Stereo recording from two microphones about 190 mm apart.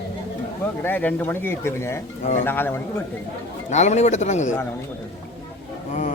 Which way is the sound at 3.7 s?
35° left (ahead or behind).